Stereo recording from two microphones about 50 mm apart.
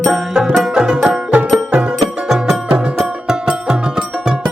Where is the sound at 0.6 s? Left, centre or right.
Centre.